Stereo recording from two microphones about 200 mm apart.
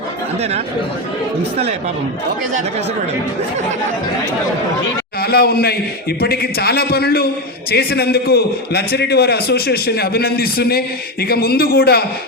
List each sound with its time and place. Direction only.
5.2 s a man's voice: 50° left (ahead or behind)